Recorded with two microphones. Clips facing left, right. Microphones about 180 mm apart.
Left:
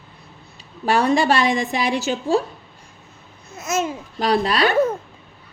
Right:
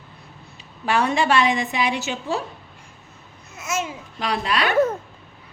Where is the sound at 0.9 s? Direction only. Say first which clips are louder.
Left 3 dB; 35° left (ahead or behind).